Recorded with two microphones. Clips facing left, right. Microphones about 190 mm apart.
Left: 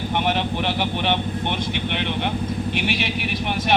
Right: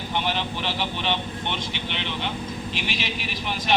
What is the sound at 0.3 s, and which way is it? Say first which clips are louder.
Speech: left 5 dB; 60° left (ahead or behind).